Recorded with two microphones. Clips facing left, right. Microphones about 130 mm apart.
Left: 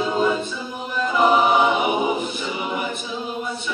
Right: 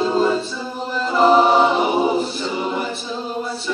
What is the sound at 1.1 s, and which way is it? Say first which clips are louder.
Choir: right 4 dB; 35° right (ahead or behind).